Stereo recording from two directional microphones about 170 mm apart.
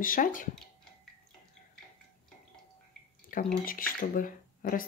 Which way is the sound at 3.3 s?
50° left (ahead or behind).